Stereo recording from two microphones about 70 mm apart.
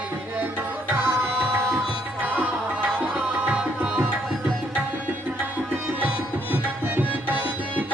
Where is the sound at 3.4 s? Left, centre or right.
Centre.